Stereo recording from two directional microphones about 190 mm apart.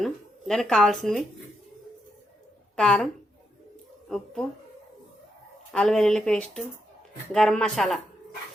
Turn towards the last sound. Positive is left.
turn(degrees=0)  # may be behind; listen again after turning